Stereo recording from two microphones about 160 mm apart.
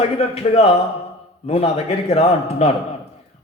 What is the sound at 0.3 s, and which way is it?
Speech, 40° left (ahead or behind).